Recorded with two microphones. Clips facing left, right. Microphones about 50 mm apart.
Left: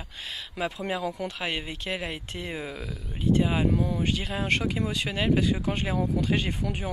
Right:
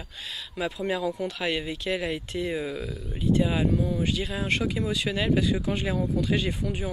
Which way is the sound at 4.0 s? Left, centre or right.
Left.